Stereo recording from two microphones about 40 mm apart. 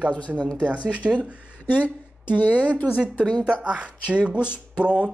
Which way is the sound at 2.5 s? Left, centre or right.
Right.